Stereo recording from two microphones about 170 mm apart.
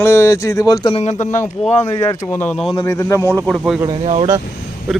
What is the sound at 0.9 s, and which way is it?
Speech, 45° left (ahead or behind).